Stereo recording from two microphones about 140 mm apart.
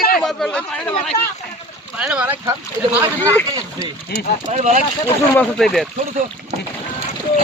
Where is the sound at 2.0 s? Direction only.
10° right (ahead or behind).